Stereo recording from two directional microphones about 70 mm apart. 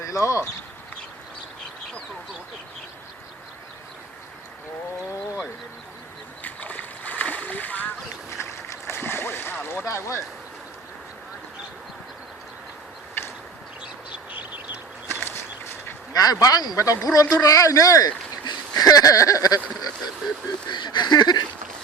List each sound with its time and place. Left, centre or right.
0.0 s speech: left
6.4 s splash: left
8.3 s boat: left
9.8 s speech: left
14.3 s bird: right
15.0 s a sound: left
16.1 s speech: left
18.4 s speech: left
20.7 s a sound: left